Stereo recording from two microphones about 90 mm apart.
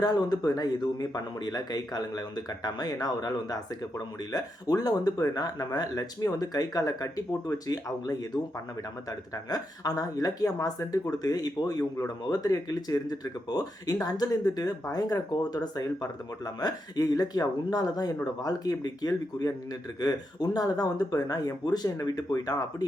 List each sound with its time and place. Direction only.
0.0 s speech: 45° left (ahead or behind)